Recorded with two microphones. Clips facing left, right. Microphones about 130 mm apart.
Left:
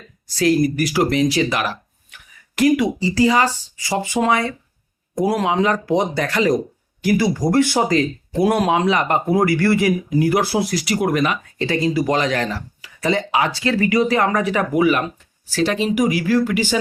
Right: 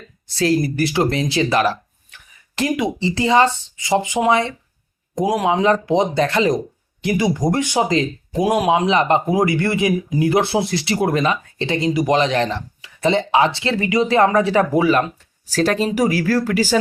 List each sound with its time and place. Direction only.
0.3 s speech: 30° right (ahead or behind)
5.5 s speech: 30° right (ahead or behind)
15.5 s speech: 40° right (ahead or behind)